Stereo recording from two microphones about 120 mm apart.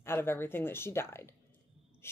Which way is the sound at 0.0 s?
20° left (ahead or behind).